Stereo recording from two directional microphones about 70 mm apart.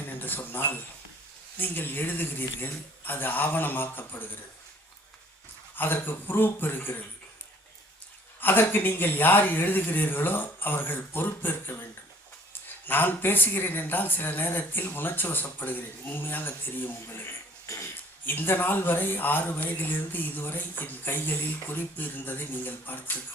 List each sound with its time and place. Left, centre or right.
0.2 s speech: left
5.7 s speech: left
8.4 s speech: left
17.7 s a sound: left
18.3 s speech: left